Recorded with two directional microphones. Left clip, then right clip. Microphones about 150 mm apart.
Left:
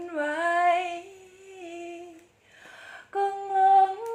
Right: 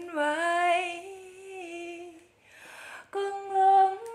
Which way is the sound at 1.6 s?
15° right (ahead or behind).